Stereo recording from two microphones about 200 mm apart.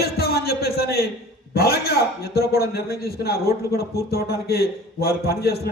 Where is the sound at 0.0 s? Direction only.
50° left (ahead or behind).